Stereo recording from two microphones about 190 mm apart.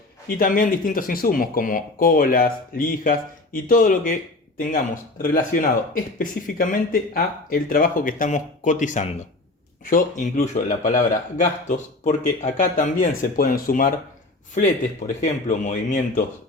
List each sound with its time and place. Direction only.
0.3 s speech: 50° left (ahead or behind)